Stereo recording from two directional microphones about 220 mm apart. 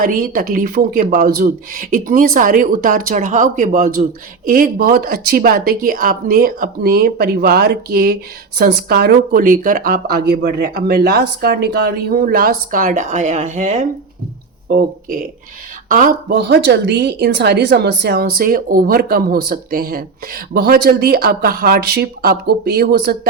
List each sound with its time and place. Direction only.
0.0 s speech: 40° right (ahead or behind)